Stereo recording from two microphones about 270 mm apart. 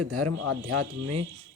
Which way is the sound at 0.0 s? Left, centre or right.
Right.